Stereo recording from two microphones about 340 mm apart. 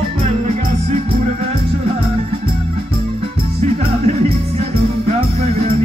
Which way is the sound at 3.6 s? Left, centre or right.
Centre.